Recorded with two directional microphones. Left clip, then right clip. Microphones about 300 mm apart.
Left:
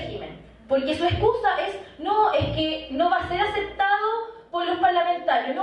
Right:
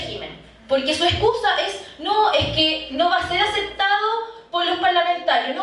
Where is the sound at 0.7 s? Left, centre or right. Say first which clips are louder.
Right 4 dB; centre.